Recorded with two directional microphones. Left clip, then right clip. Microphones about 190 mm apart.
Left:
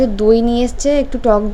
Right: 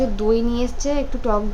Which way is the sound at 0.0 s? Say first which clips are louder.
Left 7 dB; 25° left (ahead or behind).